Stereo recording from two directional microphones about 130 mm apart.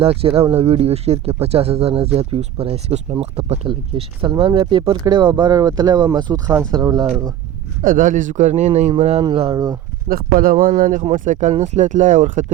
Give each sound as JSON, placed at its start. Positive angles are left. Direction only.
{"t": 0.0, "sound": "speech", "side_deg": -45}
{"t": 7.8, "sound": "speech", "side_deg": -90}
{"t": 9.5, "sound": "speech", "side_deg": -25}
{"t": 10.3, "sound": "speech", "side_deg": -90}
{"t": 11.3, "sound": "speech", "side_deg": -70}